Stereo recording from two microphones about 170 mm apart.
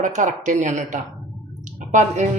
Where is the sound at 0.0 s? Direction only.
45° right (ahead or behind).